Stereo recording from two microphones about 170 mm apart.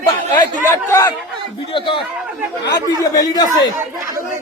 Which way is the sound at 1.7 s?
30° left (ahead or behind).